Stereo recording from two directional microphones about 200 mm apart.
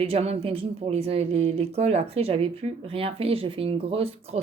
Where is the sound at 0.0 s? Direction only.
30° right (ahead or behind).